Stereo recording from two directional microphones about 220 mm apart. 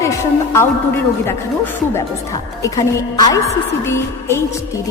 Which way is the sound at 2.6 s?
15° left (ahead or behind).